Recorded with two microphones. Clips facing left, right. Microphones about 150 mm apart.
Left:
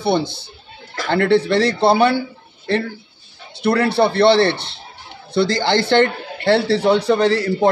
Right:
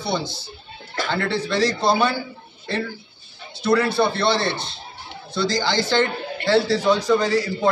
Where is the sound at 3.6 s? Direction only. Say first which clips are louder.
Left 3 dB; 65° left (ahead or behind).